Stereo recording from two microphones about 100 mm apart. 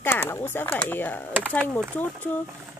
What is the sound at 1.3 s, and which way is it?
Speech, 20° right (ahead or behind).